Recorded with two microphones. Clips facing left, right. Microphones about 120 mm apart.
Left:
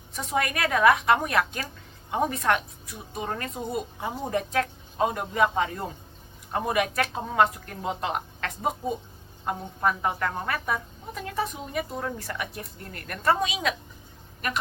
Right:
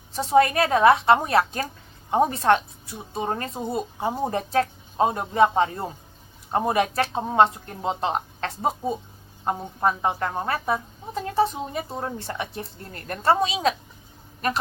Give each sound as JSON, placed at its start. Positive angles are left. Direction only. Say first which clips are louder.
{"t": 0.1, "sound": "a woman's voice", "louder": "right 9 dB", "side_deg": -30}